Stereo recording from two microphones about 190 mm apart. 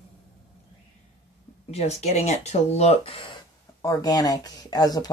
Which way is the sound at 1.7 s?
35° left (ahead or behind).